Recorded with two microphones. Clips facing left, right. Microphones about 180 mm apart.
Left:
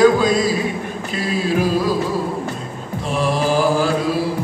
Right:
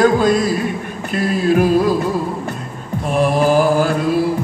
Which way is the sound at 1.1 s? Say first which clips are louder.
Right 5 dB; 55° right (ahead or behind).